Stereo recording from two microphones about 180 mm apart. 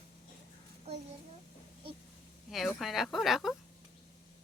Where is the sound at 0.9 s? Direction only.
35° right (ahead or behind).